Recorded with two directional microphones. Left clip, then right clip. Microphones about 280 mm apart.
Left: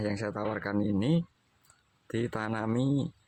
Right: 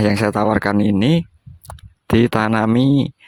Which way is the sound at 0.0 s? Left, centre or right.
Right.